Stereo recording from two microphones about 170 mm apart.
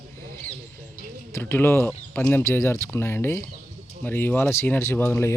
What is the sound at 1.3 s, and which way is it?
A man's voice, 15° left (ahead or behind).